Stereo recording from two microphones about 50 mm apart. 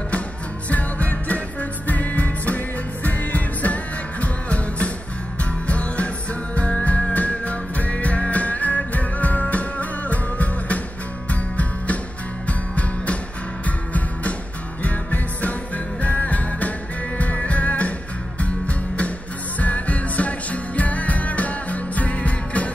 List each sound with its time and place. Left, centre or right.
0.7 s music: left
12.4 s music: left